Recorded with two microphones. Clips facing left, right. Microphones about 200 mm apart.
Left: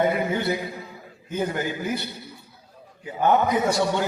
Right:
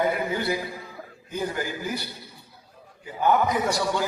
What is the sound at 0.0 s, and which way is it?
Speech, 25° left (ahead or behind).